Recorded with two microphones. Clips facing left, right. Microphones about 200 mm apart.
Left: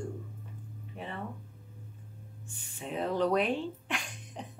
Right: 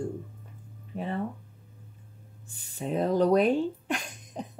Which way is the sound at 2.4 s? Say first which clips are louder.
Right 7 dB; 35° right (ahead or behind).